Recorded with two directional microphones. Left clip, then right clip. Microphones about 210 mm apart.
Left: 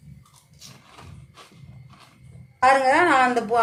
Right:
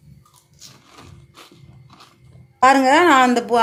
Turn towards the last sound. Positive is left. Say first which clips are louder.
# right 5 dB
turn(degrees=-40)  # may be behind; listen again after turning